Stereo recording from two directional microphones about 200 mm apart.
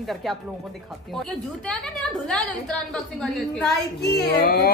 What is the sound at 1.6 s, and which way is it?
A woman's voice, 5° left (ahead or behind).